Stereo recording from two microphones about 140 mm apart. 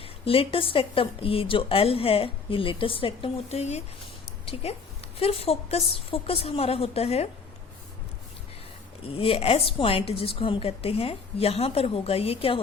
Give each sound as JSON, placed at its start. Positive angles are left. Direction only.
{"t": 0.0, "sound": "a woman's voice", "side_deg": 40}
{"t": 9.0, "sound": "a woman's voice", "side_deg": 40}